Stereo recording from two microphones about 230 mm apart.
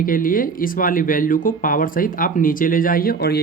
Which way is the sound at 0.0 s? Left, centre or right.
Left.